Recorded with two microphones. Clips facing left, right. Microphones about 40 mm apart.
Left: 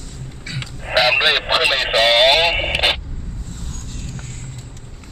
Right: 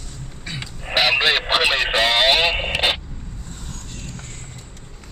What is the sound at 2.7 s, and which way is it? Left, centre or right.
Radio, left.